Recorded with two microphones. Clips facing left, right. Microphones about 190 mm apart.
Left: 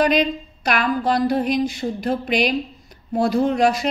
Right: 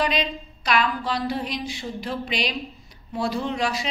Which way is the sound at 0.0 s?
50° left (ahead or behind).